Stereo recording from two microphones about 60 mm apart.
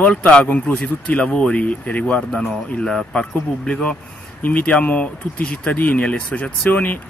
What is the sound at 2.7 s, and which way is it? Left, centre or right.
Speech, centre.